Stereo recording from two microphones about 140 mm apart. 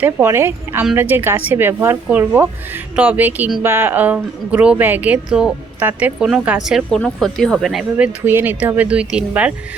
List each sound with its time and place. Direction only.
0.0 s speech: 15° right (ahead or behind)